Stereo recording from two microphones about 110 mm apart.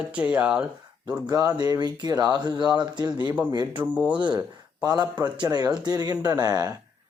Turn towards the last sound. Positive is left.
turn(degrees=-35)  # may be behind; listen again after turning